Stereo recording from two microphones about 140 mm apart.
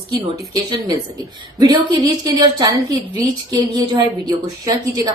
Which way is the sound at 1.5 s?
30° right (ahead or behind).